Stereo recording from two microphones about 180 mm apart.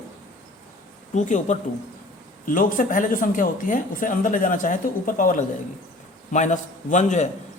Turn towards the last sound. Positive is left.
turn(degrees=40)  # may be behind; listen again after turning